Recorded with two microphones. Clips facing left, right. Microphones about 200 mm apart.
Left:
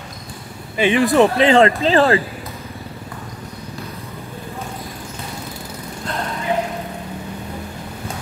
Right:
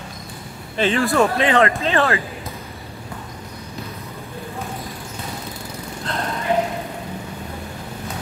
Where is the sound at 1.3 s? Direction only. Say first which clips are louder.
Left 4 dB; 30° left (ahead or behind).